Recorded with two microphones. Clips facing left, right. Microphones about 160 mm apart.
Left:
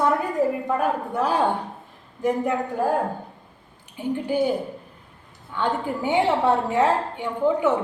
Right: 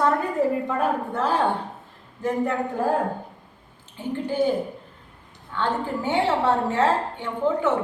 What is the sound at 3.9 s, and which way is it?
Speech, 15° left (ahead or behind).